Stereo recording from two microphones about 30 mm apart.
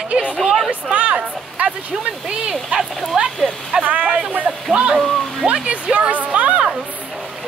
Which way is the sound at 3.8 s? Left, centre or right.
Right.